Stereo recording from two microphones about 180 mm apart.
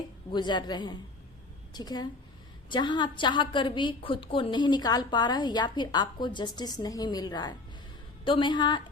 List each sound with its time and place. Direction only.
0.3 s a woman's voice: 25° left (ahead or behind)